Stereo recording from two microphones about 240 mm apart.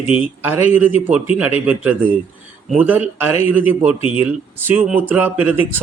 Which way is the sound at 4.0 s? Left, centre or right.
Left.